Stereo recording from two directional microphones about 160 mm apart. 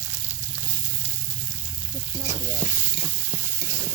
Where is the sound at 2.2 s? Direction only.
20° right (ahead or behind).